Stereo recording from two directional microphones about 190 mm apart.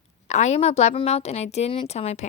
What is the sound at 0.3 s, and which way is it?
Speech, 35° left (ahead or behind).